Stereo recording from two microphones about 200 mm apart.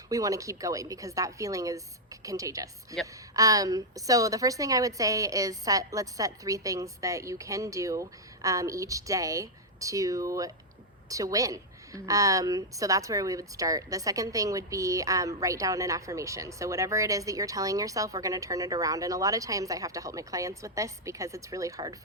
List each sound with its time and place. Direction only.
0.1 s a woman's voice: 15° right (ahead or behind)